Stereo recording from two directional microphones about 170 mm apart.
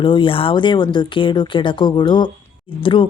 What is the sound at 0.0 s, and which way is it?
Speech, 30° left (ahead or behind).